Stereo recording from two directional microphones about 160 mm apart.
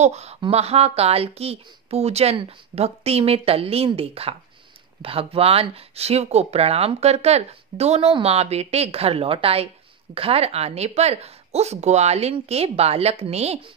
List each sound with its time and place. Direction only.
0.0 s speech: 45° right (ahead or behind)